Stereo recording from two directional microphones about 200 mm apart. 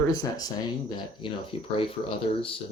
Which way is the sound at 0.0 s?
20° left (ahead or behind).